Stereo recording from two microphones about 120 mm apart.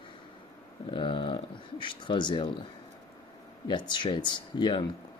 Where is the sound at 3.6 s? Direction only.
40° left (ahead or behind).